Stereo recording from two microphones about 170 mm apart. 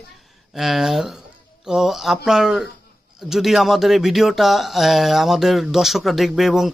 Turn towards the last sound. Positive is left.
turn(degrees=0)  # may be behind; listen again after turning